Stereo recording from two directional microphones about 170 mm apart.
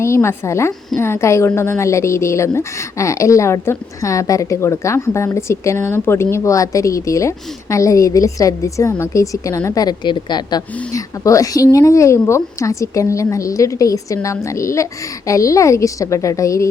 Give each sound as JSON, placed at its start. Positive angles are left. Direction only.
{"t": 0.0, "sound": "a woman's voice", "side_deg": 15}